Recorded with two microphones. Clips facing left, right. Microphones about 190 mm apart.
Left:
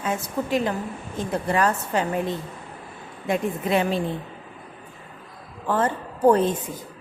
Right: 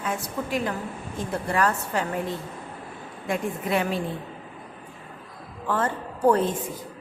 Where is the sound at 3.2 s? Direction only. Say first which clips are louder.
Left 3 dB; 20° left (ahead or behind).